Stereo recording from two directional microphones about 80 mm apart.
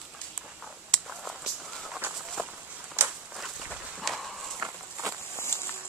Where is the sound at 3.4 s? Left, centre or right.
Centre.